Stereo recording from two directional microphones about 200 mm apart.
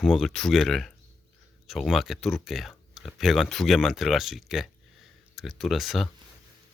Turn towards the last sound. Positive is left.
turn(degrees=0)  # may be behind; listen again after turning